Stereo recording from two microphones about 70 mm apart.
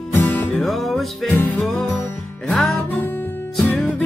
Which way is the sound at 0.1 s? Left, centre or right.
Left.